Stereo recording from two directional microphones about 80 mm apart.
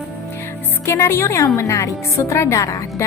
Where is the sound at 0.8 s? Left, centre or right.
Left.